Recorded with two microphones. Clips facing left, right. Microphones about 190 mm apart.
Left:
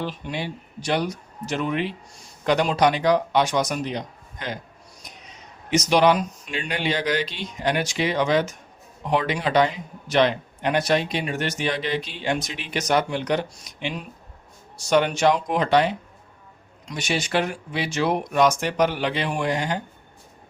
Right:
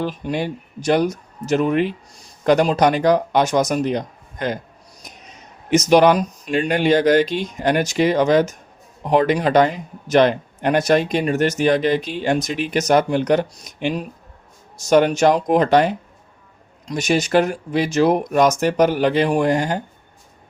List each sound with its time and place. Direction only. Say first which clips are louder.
0.0 s speech: right 6 dB; 45° right (ahead or behind)
5.7 s speech: right 5 dB; 45° right (ahead or behind)